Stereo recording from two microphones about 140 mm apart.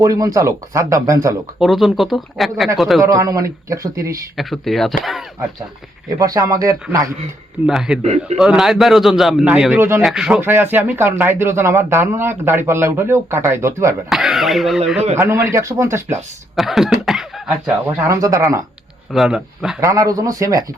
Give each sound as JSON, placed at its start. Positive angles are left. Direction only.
{"t": 0.0, "sound": "speech", "side_deg": -25}
{"t": 1.5, "sound": "a man's voice", "side_deg": 0}
{"t": 3.0, "sound": "speech", "side_deg": -25}
{"t": 4.4, "sound": "a man's voice", "side_deg": 0}
{"t": 6.1, "sound": "speech", "side_deg": -25}
{"t": 7.7, "sound": "a man's voice", "side_deg": -5}
{"t": 8.0, "sound": "a man's voice", "side_deg": -50}
{"t": 8.4, "sound": "a man's voice", "side_deg": -5}
{"t": 14.1, "sound": "a man's voice", "side_deg": 0}
{"t": 15.2, "sound": "speech", "side_deg": -20}
{"t": 16.6, "sound": "a man's voice", "side_deg": 0}
{"t": 18.1, "sound": "speech", "side_deg": -20}
{"t": 19.1, "sound": "a man's voice", "side_deg": -5}
{"t": 19.8, "sound": "speech", "side_deg": -25}